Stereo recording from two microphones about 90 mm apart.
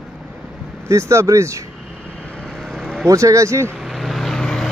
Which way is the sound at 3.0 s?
35° right (ahead or behind).